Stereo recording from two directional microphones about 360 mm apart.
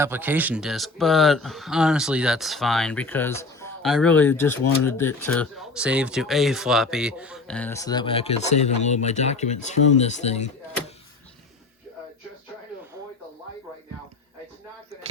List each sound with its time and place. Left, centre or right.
0.0 s speech: centre